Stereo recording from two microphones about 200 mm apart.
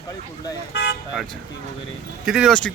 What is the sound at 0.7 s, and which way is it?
Vehicle, 60° left (ahead or behind).